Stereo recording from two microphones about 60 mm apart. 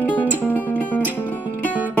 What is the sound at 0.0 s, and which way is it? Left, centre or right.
Music, left.